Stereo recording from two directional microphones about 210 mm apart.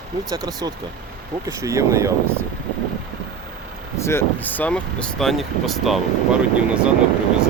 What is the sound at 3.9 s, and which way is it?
Speech, 10° left (ahead or behind).